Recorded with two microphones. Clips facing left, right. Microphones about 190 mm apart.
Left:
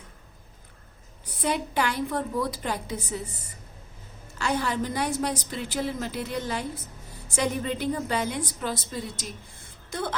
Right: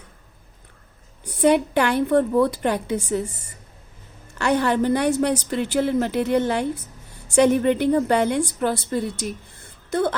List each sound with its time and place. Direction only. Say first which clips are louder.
1.4 s a woman's voice: right 9 dB; 65° right (ahead or behind)
4.4 s a woman's voice: right 7 dB; 65° right (ahead or behind)